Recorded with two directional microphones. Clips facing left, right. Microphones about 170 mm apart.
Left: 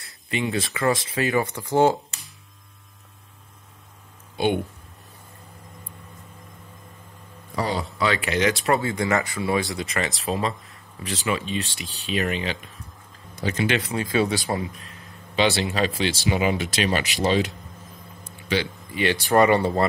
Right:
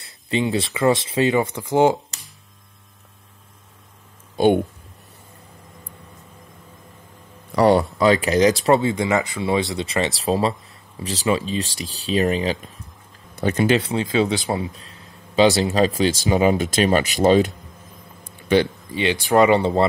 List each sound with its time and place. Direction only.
0.3 s speech: 30° right (ahead or behind); by 2.0 s 15° right (ahead or behind)
4.4 s speech: 45° right (ahead or behind)
7.5 s speech: 70° right (ahead or behind)
8.0 s speech: 40° right (ahead or behind)
8.6 s speech: 25° right (ahead or behind)
13.7 s speech: 30° right (ahead or behind)
14.1 s speech: 20° right (ahead or behind); by 17.5 s 50° right (ahead or behind)
18.2 s a sound: 55° right (ahead or behind)
19.2 s speech: 15° right (ahead or behind)